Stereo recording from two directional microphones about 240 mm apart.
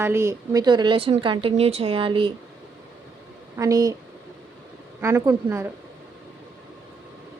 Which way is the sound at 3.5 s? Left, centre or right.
Centre.